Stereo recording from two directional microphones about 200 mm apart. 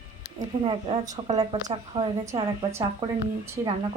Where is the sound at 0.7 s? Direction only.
30° right (ahead or behind).